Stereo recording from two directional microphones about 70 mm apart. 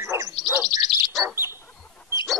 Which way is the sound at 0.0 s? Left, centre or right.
Right.